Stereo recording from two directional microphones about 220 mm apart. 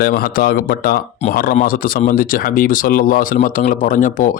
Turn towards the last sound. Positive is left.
turn(degrees=35)  # may be behind; listen again after turning